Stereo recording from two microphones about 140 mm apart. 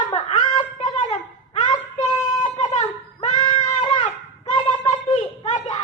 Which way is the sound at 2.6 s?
55° left (ahead or behind).